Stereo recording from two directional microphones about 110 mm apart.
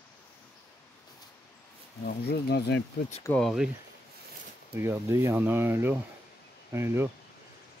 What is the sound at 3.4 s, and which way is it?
Speech, centre (ahead or behind).